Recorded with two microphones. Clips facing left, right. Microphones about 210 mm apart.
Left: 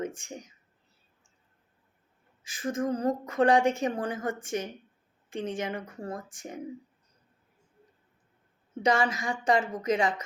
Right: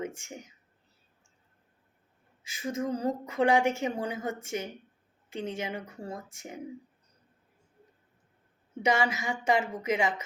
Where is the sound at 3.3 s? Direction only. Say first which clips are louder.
Left 2 dB; 25° right (ahead or behind).